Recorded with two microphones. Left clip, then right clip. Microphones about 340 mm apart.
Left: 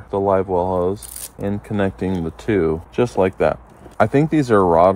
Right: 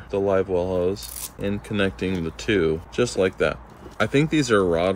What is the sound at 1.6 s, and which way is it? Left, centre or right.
Speech, centre.